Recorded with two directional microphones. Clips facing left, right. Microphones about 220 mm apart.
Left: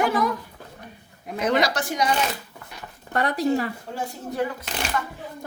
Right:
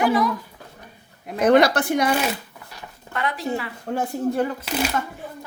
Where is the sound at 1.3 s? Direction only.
55° right (ahead or behind).